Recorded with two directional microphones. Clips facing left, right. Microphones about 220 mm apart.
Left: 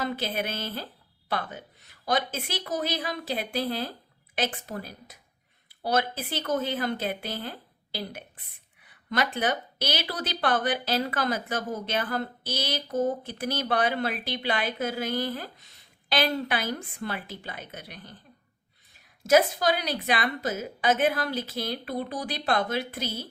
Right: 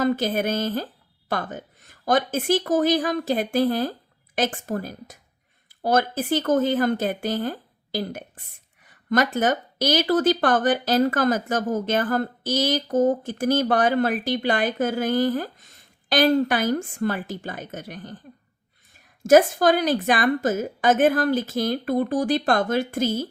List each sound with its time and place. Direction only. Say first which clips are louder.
0.0 s speech: right 8 dB; 45° right (ahead or behind)
19.2 s speech: right 6 dB; 50° right (ahead or behind)